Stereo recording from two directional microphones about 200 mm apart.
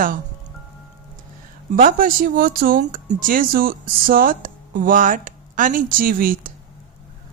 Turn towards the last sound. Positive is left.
turn(degrees=-45)  # may be behind; listen again after turning